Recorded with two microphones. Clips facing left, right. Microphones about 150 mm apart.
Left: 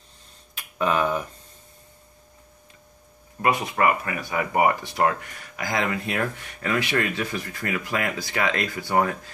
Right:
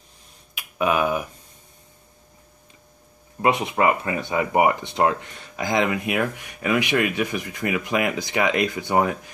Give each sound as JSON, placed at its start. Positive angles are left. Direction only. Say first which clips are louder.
{"t": 0.6, "sound": "speech", "louder": "right 2 dB", "side_deg": -10}
{"t": 3.3, "sound": "speech", "louder": "right 2 dB", "side_deg": -20}